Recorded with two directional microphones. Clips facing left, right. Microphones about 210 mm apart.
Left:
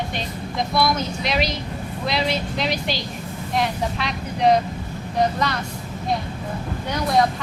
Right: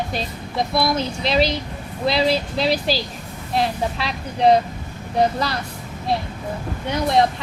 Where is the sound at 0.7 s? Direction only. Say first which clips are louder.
Even; 30° right (ahead or behind).